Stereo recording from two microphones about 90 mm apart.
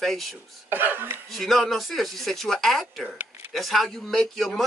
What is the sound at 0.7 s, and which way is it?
Speech, 25° right (ahead or behind).